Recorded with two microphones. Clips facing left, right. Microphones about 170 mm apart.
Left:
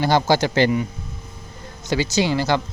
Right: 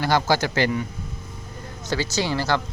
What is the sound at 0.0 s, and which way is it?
Speech, 25° left (ahead or behind).